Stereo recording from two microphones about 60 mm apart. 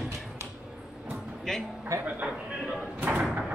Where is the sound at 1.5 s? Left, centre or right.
Centre.